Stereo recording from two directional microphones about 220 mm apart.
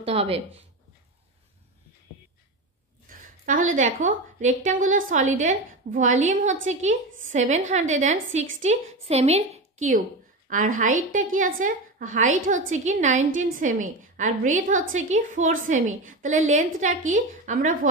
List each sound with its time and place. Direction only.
0.0 s speech: 25° right (ahead or behind)
3.1 s a woman's voice: 35° right (ahead or behind)